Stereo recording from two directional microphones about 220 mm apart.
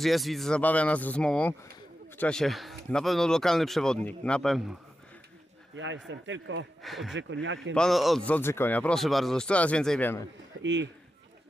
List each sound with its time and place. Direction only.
0.0 s speech: centre (ahead or behind)
5.8 s a man's voice: 60° right (ahead or behind)
6.8 s speech: centre (ahead or behind)
7.2 s a man's voice: 55° right (ahead or behind)
7.7 s speech: centre (ahead or behind)
10.6 s a man's voice: 55° right (ahead or behind)